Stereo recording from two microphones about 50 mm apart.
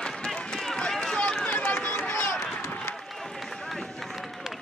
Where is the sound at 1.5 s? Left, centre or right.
Left.